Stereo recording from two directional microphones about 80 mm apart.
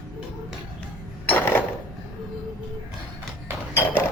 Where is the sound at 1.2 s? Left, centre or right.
Left.